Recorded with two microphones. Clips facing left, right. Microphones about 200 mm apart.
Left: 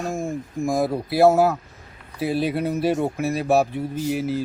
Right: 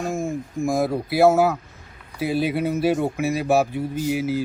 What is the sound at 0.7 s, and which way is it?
A man's voice, centre (ahead or behind).